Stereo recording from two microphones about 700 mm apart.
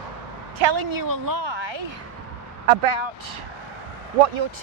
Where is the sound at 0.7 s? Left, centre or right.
Right.